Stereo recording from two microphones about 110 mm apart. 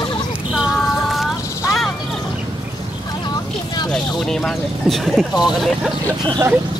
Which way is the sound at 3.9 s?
5° left (ahead or behind).